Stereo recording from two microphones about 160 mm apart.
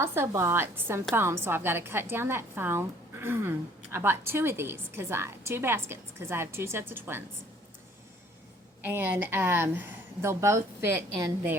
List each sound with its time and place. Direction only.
0.0 s a woman's voice: 15° right (ahead or behind)
8.8 s a woman's voice: 10° right (ahead or behind)